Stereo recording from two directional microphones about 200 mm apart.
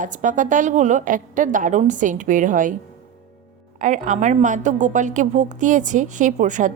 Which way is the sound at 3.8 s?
40° right (ahead or behind).